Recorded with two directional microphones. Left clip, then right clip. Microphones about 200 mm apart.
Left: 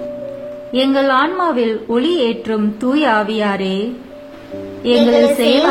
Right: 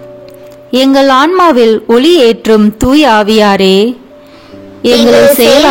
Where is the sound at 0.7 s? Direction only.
55° right (ahead or behind).